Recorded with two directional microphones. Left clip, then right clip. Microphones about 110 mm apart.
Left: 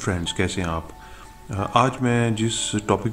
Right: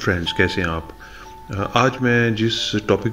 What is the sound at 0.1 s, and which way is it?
Speech, 10° left (ahead or behind).